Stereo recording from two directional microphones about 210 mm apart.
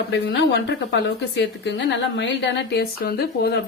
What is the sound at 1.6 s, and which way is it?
A woman's voice, 55° left (ahead or behind).